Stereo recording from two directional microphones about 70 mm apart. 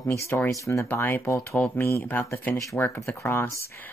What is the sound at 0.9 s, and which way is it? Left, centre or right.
Speech, left.